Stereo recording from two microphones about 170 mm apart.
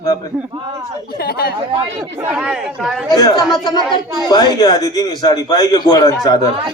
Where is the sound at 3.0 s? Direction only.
20° left (ahead or behind).